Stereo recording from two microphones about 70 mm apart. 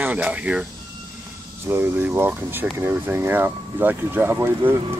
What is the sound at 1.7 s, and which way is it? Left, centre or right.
Speech, right.